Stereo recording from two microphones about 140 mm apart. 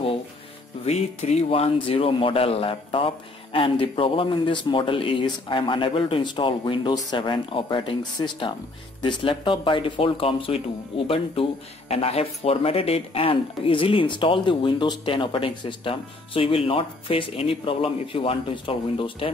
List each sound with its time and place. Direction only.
0.8 s speech: 50° left (ahead or behind)
11.9 s speech: 45° left (ahead or behind)